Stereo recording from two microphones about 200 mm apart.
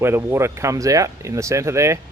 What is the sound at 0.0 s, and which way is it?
Speech, 10° right (ahead or behind).